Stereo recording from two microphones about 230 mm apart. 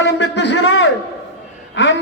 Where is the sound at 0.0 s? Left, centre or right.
Left.